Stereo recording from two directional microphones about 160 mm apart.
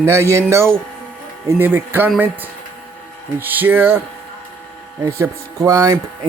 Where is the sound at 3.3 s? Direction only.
10° right (ahead or behind).